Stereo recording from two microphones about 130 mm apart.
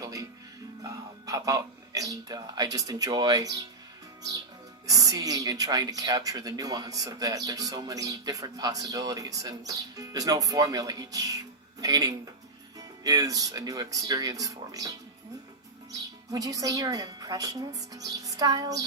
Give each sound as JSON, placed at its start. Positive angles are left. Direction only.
{"t": 0.0, "sound": "music", "side_deg": -25}
{"t": 0.9, "sound": "speech", "side_deg": -25}
{"t": 4.2, "sound": "music", "side_deg": -30}
{"t": 4.9, "sound": "speech", "side_deg": -30}